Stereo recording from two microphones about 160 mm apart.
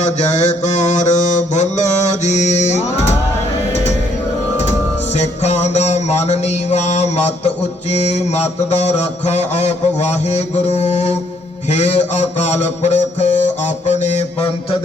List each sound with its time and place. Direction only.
0.0 s mantra: 45° left (ahead or behind)
5.1 s music: 45° left (ahead or behind)
7.9 s mantra: 45° left (ahead or behind)